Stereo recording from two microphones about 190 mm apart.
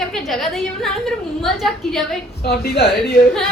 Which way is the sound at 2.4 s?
55° left (ahead or behind).